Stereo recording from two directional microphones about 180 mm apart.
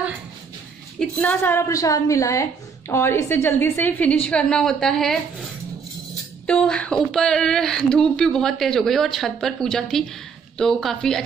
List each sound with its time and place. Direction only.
0.9 s a woman's voice: 10° left (ahead or behind)
6.4 s speech: 5° left (ahead or behind)